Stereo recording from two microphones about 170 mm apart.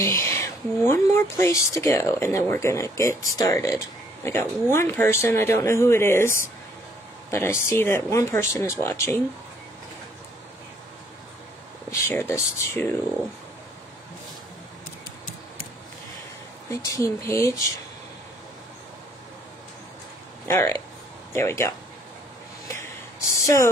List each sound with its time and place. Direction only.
0.0 s speech: 15° left (ahead or behind)
11.9 s speech: 15° left (ahead or behind)
16.8 s speech: 20° left (ahead or behind)
20.4 s speech: 15° left (ahead or behind)
22.7 s a sound: 20° left (ahead or behind)